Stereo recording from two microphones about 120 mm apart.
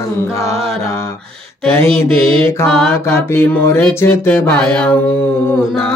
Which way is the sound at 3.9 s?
20° left (ahead or behind).